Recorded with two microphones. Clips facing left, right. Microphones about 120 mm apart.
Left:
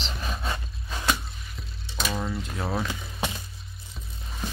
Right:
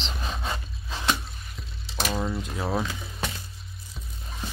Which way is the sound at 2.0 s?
5° right (ahead or behind).